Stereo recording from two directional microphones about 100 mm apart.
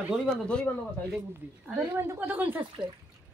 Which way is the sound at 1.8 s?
25° right (ahead or behind).